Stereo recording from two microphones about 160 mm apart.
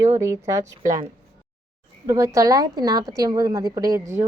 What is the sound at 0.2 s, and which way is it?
Speech, 20° right (ahead or behind).